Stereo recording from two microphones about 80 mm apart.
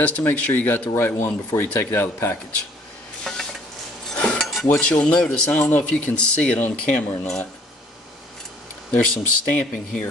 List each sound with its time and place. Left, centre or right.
0.0 s speech: left
3.3 s dishes: centre
4.1 s cutlery: centre
4.7 s speech: centre
8.9 s speech: centre